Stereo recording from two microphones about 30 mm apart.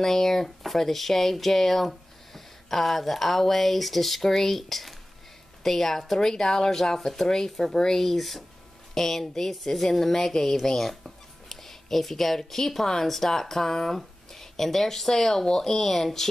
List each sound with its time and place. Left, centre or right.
0.0 s speech: centre
6.1 s speech: centre
8.0 s a woman's voice: centre